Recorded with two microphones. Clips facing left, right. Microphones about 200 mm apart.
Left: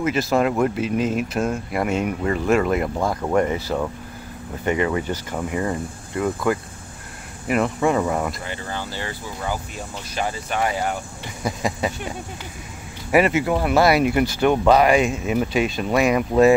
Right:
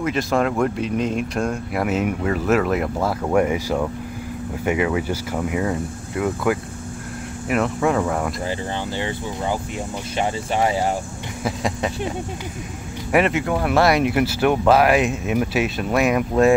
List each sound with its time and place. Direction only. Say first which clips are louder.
0.0 s speech: left 1 dB; 5° left (ahead or behind)
8.5 s speech: right 4 dB; 20° right (ahead or behind)
11.4 s speech: even; centre (ahead or behind)
13.1 s speech: left 1 dB; centre (ahead or behind)